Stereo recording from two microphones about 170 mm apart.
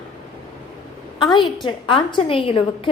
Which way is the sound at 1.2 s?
25° left (ahead or behind).